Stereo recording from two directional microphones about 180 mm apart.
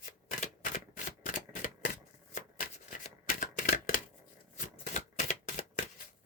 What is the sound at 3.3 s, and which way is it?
Shuffling cards, 45° left (ahead or behind).